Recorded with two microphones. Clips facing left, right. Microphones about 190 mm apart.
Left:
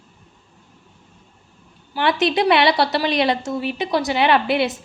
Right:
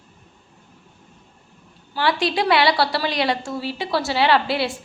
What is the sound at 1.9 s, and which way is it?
A woman's voice, 20° left (ahead or behind).